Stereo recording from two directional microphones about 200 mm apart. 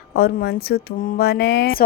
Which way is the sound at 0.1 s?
50° left (ahead or behind).